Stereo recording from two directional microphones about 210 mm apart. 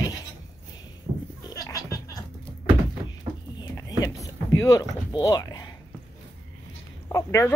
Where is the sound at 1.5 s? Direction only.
15° left (ahead or behind).